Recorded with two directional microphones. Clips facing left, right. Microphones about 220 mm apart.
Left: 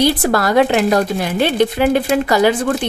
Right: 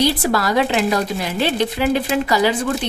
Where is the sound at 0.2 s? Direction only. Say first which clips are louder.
Left 4 dB; 50° left (ahead or behind).